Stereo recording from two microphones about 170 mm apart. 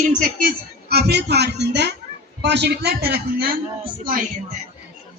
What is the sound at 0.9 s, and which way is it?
A man's voice, 70° right (ahead or behind).